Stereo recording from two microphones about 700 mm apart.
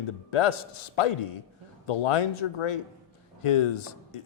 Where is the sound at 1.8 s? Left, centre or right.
Left.